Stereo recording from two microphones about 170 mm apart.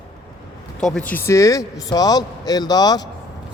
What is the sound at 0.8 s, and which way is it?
A man's voice, 5° left (ahead or behind).